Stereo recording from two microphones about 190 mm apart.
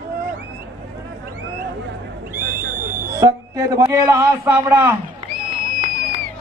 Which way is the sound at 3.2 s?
15° right (ahead or behind).